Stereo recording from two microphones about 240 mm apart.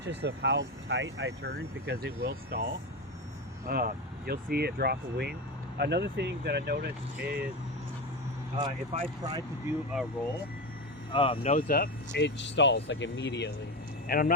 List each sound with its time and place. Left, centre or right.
0.0 s speech: right
8.5 s speech: right
9.6 s speech: centre
11.1 s speech: left